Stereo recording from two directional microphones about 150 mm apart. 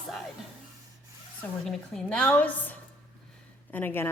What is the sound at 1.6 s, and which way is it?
A woman's voice, 5° left (ahead or behind).